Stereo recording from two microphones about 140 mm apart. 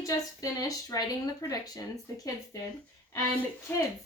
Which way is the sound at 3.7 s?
10° left (ahead or behind).